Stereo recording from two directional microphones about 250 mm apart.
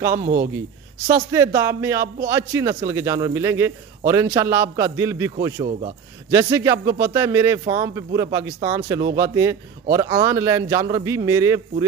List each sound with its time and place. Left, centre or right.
0.1 s a man's voice: right
1.0 s a man's voice: centre
5.4 s speech: right
6.3 s a man's voice: centre